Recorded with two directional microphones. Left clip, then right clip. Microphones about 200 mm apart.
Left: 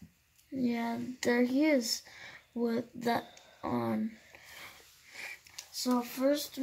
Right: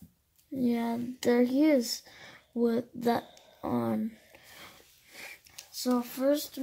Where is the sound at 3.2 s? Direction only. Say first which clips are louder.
Even; 10° right (ahead or behind).